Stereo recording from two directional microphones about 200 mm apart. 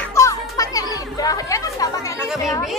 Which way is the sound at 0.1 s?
15° left (ahead or behind).